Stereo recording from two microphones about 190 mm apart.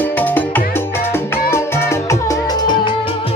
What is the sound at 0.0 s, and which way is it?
Music, 10° left (ahead or behind).